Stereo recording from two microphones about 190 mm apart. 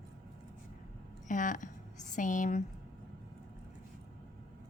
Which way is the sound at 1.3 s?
45° left (ahead or behind).